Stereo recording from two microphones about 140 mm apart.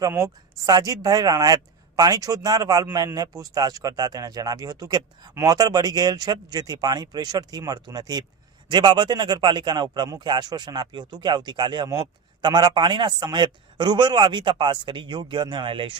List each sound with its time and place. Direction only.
0.0 s a man's voice: 25° right (ahead or behind)